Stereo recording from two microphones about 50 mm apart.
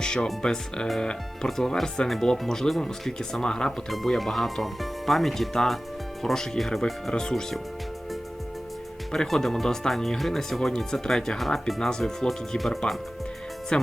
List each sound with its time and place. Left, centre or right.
0.0 s music: centre
0.4 s speech: centre
3.8 s speech: centre
9.1 s speech: centre
11.9 s speech: centre